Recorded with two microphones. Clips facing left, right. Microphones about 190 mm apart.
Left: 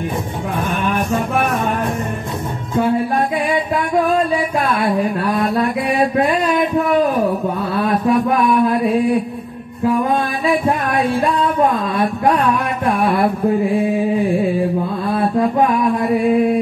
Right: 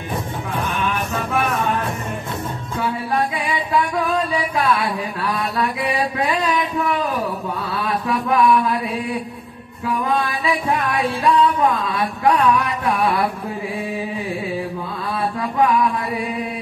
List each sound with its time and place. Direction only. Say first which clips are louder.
4.6 s mantra: left 4 dB; 50° left (ahead or behind)
10.4 s music: left 4 dB; 45° left (ahead or behind)
12.8 s a sound: left 5 dB; 50° left (ahead or behind)
13.9 s music: left 9 dB; 55° left (ahead or behind)
15.1 s mantra: left 5 dB; 50° left (ahead or behind)